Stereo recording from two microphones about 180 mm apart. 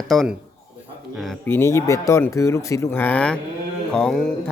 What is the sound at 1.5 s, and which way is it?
A man's voice, 15° left (ahead or behind).